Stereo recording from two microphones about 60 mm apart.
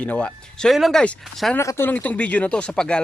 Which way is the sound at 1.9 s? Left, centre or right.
Left.